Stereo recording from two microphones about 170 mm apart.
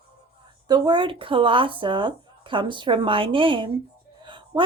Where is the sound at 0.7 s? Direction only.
25° right (ahead or behind).